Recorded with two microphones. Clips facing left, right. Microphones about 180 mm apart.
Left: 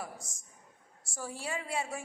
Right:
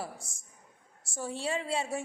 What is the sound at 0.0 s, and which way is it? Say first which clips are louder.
A woman's voice: right 2 dB; 30° right (ahead or behind).